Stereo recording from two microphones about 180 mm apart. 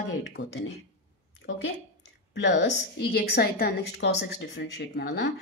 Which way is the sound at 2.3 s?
70° left (ahead or behind).